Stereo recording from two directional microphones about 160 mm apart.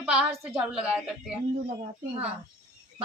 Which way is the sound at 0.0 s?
5° right (ahead or behind).